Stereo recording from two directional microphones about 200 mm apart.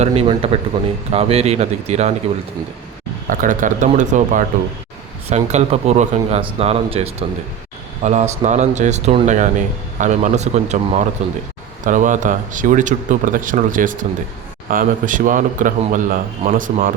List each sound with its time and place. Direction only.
0.0 s speech: 30° right (ahead or behind)
3.2 s speech: 40° right (ahead or behind)